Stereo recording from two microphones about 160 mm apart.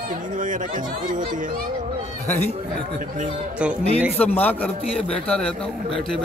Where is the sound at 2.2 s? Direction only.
15° left (ahead or behind).